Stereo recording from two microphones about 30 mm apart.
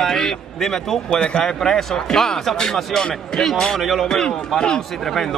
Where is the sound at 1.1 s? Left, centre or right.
Left.